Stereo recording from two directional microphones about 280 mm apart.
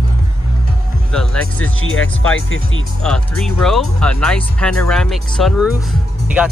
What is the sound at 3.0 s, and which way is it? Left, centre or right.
Speech, centre.